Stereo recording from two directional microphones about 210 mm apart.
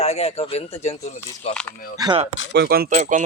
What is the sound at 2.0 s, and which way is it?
Speech, 20° right (ahead or behind).